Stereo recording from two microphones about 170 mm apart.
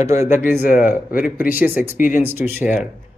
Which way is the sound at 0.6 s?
55° left (ahead or behind).